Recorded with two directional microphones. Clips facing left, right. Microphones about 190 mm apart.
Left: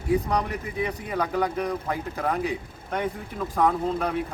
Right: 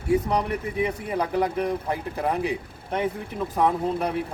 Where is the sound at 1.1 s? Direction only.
30° right (ahead or behind).